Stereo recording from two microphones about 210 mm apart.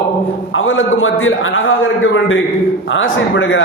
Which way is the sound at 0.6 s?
70° left (ahead or behind).